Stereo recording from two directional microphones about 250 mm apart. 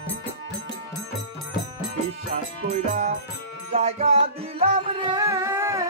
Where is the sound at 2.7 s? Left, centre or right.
Right.